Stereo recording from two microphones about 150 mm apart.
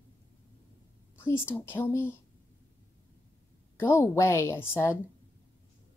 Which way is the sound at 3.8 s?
15° left (ahead or behind).